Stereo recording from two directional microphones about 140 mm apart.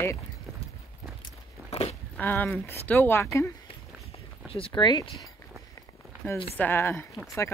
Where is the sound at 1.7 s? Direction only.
45° left (ahead or behind).